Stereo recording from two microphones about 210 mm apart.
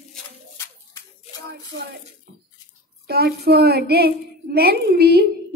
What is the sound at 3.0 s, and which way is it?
Speech, 50° right (ahead or behind).